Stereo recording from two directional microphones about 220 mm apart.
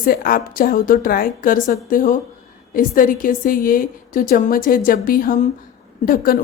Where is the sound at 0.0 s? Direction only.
40° left (ahead or behind).